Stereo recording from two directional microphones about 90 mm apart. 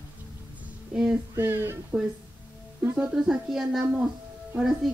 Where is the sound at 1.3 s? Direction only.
25° right (ahead or behind).